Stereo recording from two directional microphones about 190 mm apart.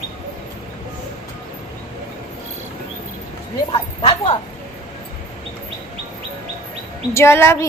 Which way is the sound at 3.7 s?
30° left (ahead or behind).